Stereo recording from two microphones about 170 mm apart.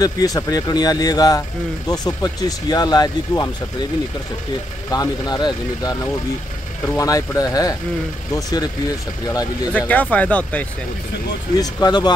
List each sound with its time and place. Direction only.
0.0 s speech: 20° left (ahead or behind)
4.8 s speech: 20° left (ahead or behind)
9.7 s speech: 10° left (ahead or behind)
11.5 s speech: 25° left (ahead or behind)